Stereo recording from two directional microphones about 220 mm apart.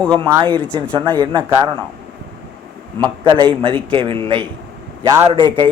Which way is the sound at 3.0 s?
20° right (ahead or behind).